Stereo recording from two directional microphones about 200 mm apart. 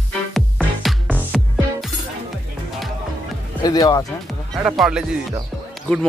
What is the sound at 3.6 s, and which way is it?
Speech, 20° left (ahead or behind).